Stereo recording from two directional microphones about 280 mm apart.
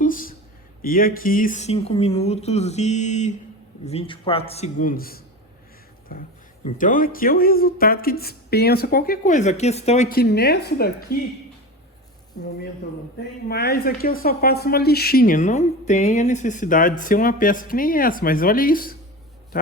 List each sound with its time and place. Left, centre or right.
0.0 s a sound: left
0.8 s speech: left
12.4 s speech: left